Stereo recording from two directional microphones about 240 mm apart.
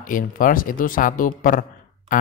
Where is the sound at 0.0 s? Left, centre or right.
Left.